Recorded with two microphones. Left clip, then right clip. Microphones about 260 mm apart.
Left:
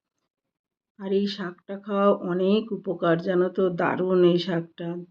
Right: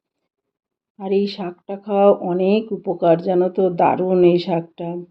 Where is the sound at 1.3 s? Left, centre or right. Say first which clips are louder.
Right 6 dB; right.